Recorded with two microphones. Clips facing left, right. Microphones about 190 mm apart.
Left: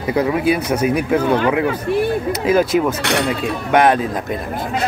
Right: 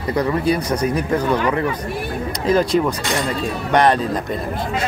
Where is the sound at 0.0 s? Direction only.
5° left (ahead or behind).